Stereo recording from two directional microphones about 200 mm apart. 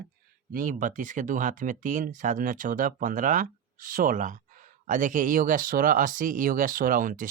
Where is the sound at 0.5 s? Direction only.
40° right (ahead or behind).